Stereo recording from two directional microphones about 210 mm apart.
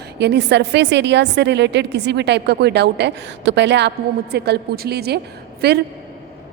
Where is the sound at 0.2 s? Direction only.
55° right (ahead or behind).